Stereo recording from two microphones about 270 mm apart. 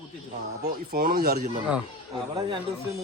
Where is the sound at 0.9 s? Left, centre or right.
Right.